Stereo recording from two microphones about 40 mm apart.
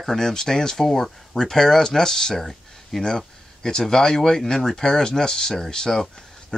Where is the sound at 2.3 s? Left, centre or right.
Centre.